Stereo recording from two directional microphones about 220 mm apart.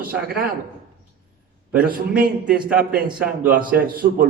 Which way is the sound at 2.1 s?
5° right (ahead or behind).